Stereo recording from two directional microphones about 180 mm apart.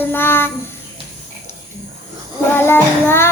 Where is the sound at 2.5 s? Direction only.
10° left (ahead or behind).